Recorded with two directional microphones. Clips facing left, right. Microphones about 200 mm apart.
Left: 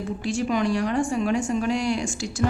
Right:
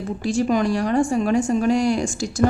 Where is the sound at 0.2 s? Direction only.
40° right (ahead or behind).